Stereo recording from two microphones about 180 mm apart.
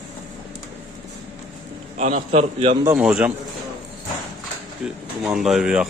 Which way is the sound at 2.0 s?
40° right (ahead or behind).